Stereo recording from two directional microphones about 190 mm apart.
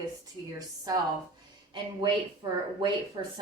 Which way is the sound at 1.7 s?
25° right (ahead or behind).